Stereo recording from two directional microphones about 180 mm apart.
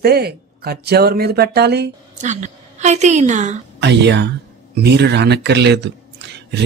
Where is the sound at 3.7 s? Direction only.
75° right (ahead or behind).